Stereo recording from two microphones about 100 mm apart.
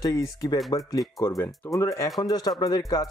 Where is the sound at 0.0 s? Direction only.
35° left (ahead or behind).